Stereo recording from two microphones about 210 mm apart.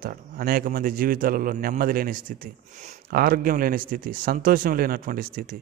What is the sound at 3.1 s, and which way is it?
Speech, 45° right (ahead or behind).